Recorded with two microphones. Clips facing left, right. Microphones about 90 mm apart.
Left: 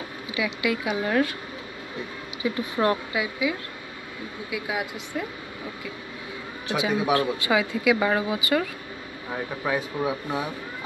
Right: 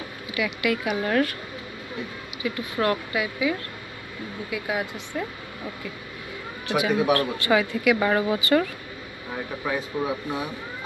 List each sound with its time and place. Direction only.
0.3 s a woman's voice: 20° left (ahead or behind)
2.4 s a woman's voice: 25° left (ahead or behind)
6.8 s speech: 15° left (ahead or behind)
9.7 s speech: 15° left (ahead or behind)